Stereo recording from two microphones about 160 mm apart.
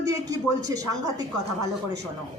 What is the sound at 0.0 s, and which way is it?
A woman's voice, 20° right (ahead or behind).